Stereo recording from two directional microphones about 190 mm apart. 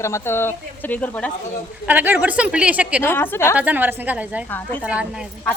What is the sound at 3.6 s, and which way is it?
Speech, 10° right (ahead or behind).